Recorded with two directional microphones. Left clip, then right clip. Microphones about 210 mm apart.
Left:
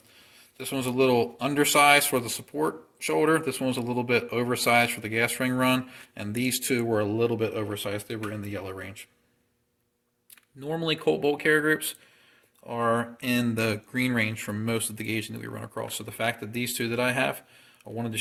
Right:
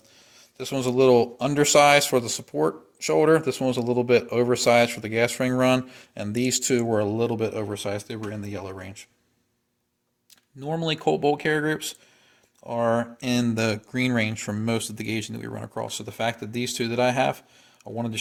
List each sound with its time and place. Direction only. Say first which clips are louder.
0.3 s speech: right 3 dB; 55° right (ahead or behind)
10.6 s speech: right 2 dB; 50° right (ahead or behind)